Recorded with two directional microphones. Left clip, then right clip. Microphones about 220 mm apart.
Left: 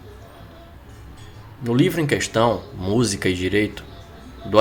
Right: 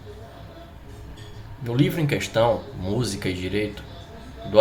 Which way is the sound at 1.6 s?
25° left (ahead or behind).